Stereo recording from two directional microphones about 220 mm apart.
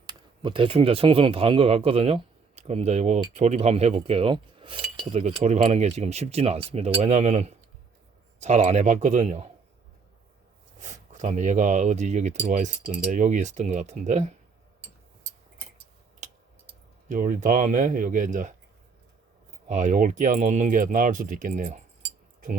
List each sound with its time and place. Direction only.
0.0 s speech: 20° right (ahead or behind)
10.8 s speech: 35° right (ahead or behind)
17.1 s speech: 35° right (ahead or behind)
19.6 s speech: 35° right (ahead or behind)